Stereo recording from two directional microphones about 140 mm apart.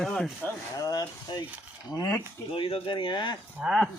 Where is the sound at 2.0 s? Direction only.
25° left (ahead or behind).